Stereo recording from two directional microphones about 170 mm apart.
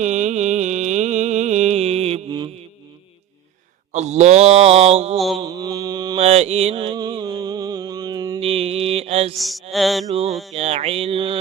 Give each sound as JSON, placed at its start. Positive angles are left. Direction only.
{"t": 0.0, "sound": "music", "side_deg": -45}
{"t": 3.9, "sound": "mantra", "side_deg": -40}
{"t": 5.1, "sound": "mantra", "side_deg": 0}
{"t": 5.4, "sound": "mantra", "side_deg": -25}
{"t": 6.1, "sound": "mantra", "side_deg": -40}
{"t": 8.4, "sound": "mantra", "side_deg": -35}
{"t": 9.4, "sound": "mantra", "side_deg": 0}
{"t": 10.1, "sound": "mantra", "side_deg": -40}